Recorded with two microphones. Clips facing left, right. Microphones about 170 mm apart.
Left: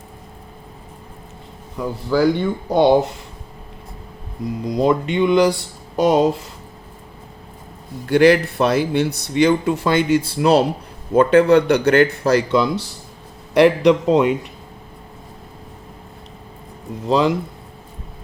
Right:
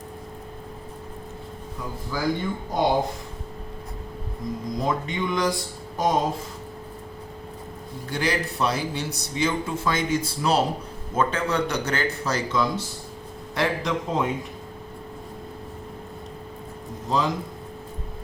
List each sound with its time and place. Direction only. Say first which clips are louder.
1.8 s a man's voice: left 11 dB; 70° left (ahead or behind)
4.6 s a man's voice: left 10 dB; 70° left (ahead or behind)
8.0 s a man's voice: left 14 dB; 70° left (ahead or behind)
17.1 s a man's voice: left 8 dB; 70° left (ahead or behind)